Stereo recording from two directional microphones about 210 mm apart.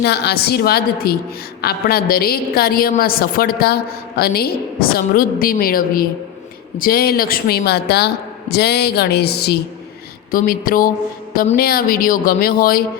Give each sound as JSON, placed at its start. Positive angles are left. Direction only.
{"t": 0.0, "sound": "a woman's voice", "side_deg": 50}